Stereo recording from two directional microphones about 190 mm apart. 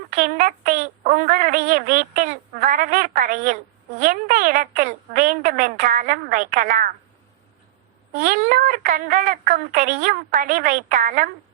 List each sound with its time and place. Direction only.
0.1 s speech: 45° right (ahead or behind)
8.1 s speech: 45° right (ahead or behind)